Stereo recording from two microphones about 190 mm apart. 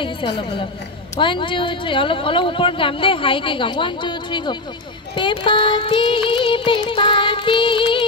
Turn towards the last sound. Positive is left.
turn(degrees=25)  # may be behind; listen again after turning